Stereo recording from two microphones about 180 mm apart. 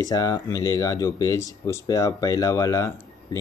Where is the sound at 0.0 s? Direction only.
20° left (ahead or behind).